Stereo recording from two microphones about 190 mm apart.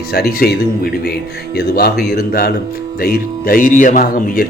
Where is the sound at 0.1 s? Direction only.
55° left (ahead or behind).